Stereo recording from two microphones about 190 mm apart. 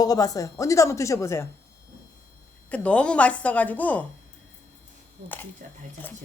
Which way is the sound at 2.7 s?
5° left (ahead or behind).